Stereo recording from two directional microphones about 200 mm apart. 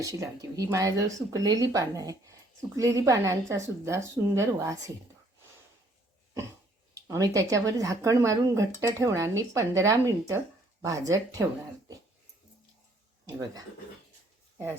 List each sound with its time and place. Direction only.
0.0 s speech: 15° right (ahead or behind)
6.9 s speech: 15° right (ahead or behind)
13.2 s speech: 20° right (ahead or behind)